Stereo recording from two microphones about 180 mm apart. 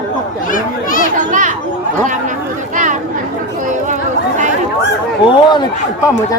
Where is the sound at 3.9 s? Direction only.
40° right (ahead or behind).